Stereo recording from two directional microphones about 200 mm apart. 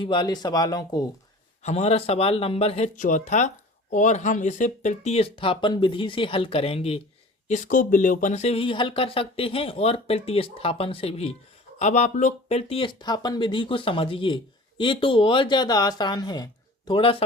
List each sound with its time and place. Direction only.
0.0 s speech: 20° left (ahead or behind)
1.6 s speech: 35° left (ahead or behind)